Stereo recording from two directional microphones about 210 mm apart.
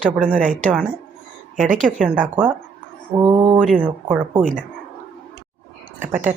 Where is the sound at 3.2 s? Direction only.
20° right (ahead or behind).